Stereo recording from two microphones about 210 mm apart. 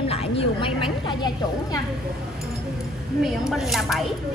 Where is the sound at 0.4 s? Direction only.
25° left (ahead or behind).